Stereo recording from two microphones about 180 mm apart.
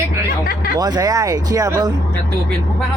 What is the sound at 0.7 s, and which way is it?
Speech, 20° right (ahead or behind).